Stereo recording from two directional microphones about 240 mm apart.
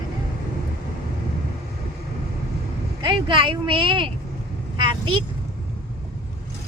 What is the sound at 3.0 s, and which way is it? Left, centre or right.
Speech, centre.